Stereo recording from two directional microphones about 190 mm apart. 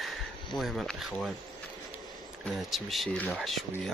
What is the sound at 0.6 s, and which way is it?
Speech, centre (ahead or behind).